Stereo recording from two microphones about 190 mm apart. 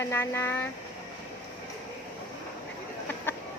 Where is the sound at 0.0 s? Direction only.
15° left (ahead or behind).